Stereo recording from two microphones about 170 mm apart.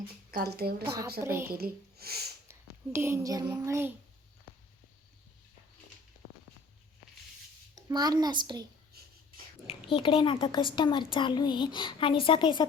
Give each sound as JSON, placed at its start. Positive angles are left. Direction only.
{"t": 0.3, "sound": "a woman's voice", "side_deg": -65}
{"t": 1.2, "sound": "a woman's voice", "side_deg": -15}
{"t": 1.5, "sound": "speech", "side_deg": -65}
{"t": 2.5, "sound": "speech", "side_deg": -15}
{"t": 7.8, "sound": "a child's voice", "side_deg": -25}
{"t": 9.6, "sound": "speech", "side_deg": 30}